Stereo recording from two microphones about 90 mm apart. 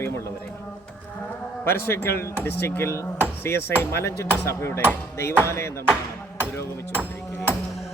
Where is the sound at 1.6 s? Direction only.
25° left (ahead or behind).